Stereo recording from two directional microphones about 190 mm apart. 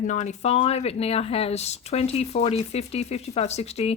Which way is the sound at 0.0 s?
40° left (ahead or behind).